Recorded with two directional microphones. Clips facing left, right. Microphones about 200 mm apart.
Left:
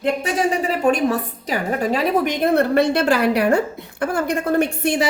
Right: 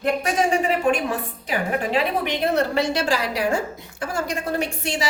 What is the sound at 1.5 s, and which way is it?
A woman's voice, 40° left (ahead or behind).